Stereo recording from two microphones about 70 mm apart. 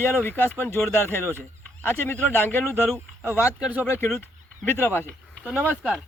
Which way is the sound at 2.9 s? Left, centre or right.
Right.